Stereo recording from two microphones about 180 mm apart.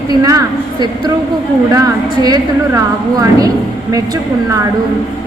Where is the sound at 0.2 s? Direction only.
20° right (ahead or behind).